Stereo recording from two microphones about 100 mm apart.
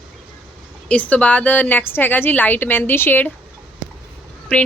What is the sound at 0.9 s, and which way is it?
A woman's voice, 15° left (ahead or behind).